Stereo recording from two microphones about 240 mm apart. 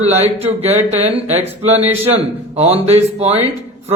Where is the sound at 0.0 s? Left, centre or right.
Right.